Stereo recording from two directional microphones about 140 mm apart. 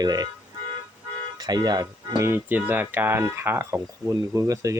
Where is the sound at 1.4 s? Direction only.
30° right (ahead or behind).